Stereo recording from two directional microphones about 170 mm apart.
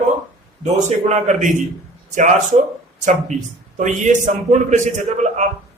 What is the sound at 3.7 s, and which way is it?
A man's voice, 45° right (ahead or behind).